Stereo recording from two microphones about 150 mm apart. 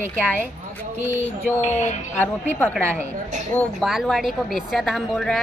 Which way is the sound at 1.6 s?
50° left (ahead or behind).